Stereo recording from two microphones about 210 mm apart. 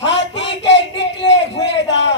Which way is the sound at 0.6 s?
55° left (ahead or behind).